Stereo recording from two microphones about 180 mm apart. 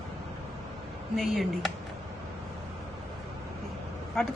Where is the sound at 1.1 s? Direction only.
Centre (ahead or behind).